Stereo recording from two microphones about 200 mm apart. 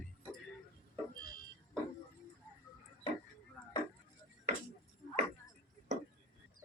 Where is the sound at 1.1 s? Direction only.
45° left (ahead or behind).